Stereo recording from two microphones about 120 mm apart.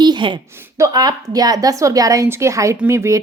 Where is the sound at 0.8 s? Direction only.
30° right (ahead or behind).